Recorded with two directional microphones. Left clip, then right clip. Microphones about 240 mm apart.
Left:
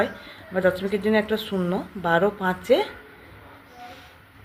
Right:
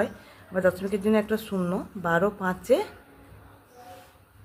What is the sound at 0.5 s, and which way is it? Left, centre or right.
A woman's voice, centre.